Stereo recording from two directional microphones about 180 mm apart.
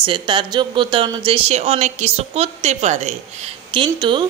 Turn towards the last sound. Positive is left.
turn(degrees=-25)  # may be behind; listen again after turning